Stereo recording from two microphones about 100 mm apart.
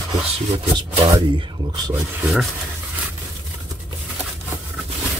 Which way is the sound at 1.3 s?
55° right (ahead or behind).